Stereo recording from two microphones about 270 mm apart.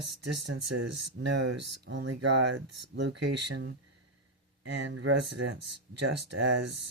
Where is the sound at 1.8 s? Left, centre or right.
Right.